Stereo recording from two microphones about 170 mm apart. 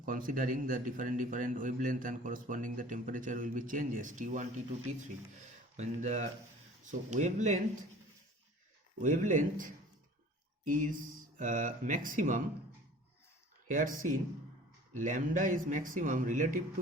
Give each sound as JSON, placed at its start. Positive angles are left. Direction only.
{"t": 0.0, "sound": "a man's voice", "side_deg": -55}
{"t": 9.0, "sound": "a man's voice", "side_deg": -45}
{"t": 13.7, "sound": "a man's voice", "side_deg": -50}